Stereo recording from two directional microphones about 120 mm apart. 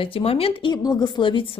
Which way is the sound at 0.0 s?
50° left (ahead or behind).